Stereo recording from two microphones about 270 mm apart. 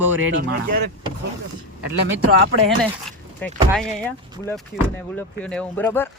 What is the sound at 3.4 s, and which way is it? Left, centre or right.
Speech, centre.